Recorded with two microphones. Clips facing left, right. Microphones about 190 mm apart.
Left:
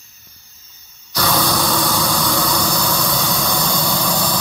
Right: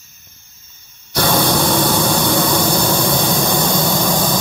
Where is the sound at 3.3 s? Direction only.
50° right (ahead or behind).